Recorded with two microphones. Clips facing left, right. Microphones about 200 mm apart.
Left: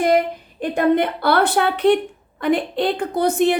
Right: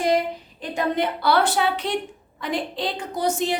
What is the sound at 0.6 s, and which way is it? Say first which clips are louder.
A woman's voice: left 7 dB; 55° left (ahead or behind).